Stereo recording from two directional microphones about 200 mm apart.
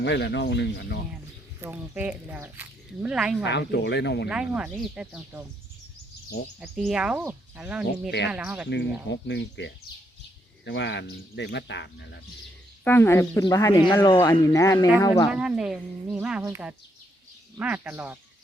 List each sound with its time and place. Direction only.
0.0 s speech: 60° left (ahead or behind)
1.6 s speech: 5° right (ahead or behind)
3.4 s speech: 55° left (ahead or behind)
4.3 s speech: 5° right (ahead or behind)
6.6 s speech: 5° right (ahead or behind)
9.0 s speech: 60° left (ahead or behind)
12.8 s a woman's voice: 10° left (ahead or behind)
15.3 s speech: 5° right (ahead or behind)